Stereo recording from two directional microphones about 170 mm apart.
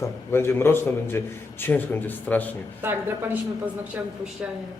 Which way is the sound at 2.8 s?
15° right (ahead or behind).